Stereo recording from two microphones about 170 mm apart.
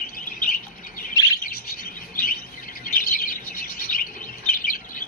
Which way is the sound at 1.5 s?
60° left (ahead or behind).